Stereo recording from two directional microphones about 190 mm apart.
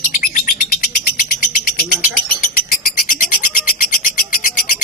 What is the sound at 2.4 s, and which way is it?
Cat, 45° left (ahead or behind).